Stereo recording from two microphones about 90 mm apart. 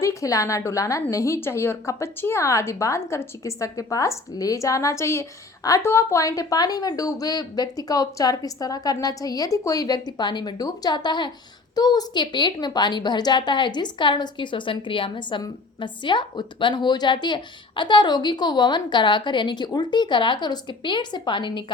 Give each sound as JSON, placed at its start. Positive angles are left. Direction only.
{"t": 0.0, "sound": "a woman's voice", "side_deg": 35}